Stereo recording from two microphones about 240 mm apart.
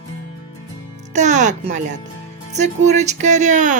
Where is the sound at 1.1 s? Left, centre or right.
Right.